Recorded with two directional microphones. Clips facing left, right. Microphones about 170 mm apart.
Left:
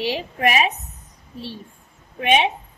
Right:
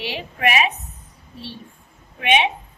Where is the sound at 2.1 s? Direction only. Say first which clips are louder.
Left 1 dB; 35° left (ahead or behind).